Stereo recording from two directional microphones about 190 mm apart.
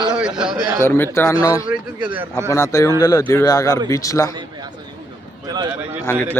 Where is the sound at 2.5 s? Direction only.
15° left (ahead or behind).